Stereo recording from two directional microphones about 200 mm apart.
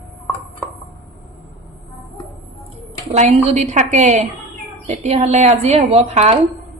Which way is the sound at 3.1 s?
35° right (ahead or behind).